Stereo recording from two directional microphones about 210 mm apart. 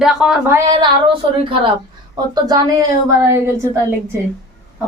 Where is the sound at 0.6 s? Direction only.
20° right (ahead or behind).